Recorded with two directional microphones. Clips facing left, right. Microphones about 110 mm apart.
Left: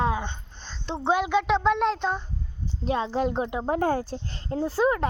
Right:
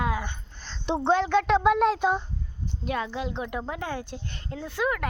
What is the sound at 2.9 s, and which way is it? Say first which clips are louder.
Speech: left 4 dB; 30° left (ahead or behind).